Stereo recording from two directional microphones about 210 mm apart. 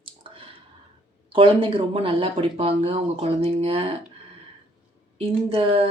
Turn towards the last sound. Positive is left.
turn(degrees=-25)  # may be behind; listen again after turning